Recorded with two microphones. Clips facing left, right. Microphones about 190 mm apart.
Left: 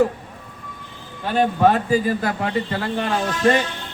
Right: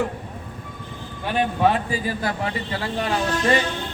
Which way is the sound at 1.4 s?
45° left (ahead or behind).